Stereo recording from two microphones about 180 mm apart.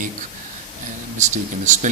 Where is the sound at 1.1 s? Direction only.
45° right (ahead or behind).